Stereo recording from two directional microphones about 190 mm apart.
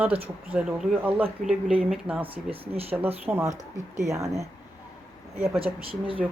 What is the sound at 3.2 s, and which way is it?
Speech, 15° right (ahead or behind).